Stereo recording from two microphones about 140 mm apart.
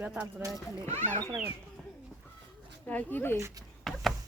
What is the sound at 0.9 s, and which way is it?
Speech, 55° right (ahead or behind).